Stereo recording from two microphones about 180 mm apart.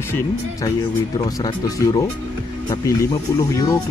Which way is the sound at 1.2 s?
20° left (ahead or behind).